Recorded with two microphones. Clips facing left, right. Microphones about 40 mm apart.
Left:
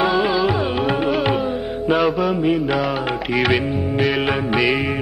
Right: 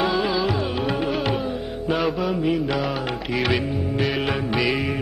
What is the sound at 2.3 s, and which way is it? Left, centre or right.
Music, centre.